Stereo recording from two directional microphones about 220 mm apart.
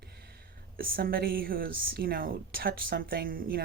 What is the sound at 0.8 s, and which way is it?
A woman's voice, 40° right (ahead or behind).